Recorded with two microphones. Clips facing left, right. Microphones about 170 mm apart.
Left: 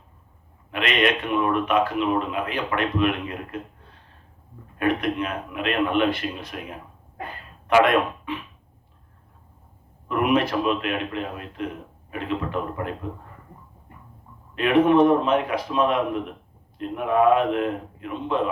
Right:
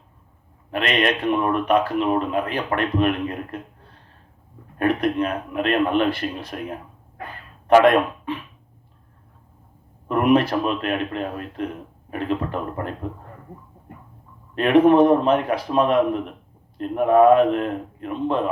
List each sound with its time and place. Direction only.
0.7 s a man's voice: 40° right (ahead or behind)
4.8 s a man's voice: 40° right (ahead or behind)
10.1 s a man's voice: 40° right (ahead or behind)
14.5 s speech: 45° right (ahead or behind)